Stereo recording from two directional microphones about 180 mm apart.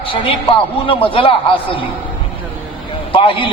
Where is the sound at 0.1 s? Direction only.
30° left (ahead or behind).